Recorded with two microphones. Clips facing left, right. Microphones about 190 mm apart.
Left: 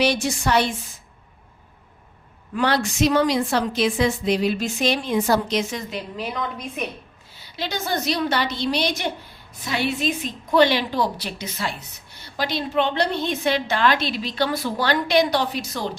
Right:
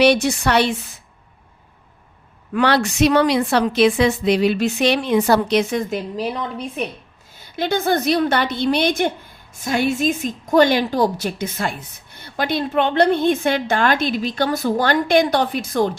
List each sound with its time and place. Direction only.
0.0 s a woman's voice: 65° right (ahead or behind)
2.5 s a woman's voice: 70° right (ahead or behind)
6.1 s a woman's voice: 35° right (ahead or behind)
7.3 s a woman's voice: 50° right (ahead or behind)